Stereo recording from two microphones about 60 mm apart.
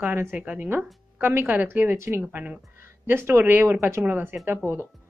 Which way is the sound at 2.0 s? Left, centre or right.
Right.